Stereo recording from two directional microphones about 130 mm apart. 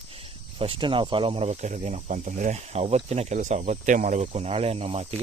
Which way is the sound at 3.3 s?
70° right (ahead or behind).